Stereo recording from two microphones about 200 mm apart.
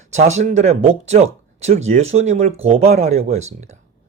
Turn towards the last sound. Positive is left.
turn(degrees=-35)  # may be behind; listen again after turning